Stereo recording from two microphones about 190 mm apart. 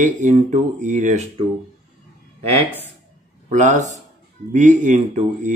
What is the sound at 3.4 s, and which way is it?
Speech, 40° right (ahead or behind).